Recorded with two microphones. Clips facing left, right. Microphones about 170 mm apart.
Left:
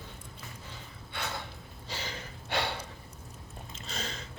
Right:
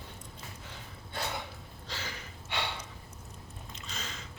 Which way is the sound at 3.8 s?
30° left (ahead or behind).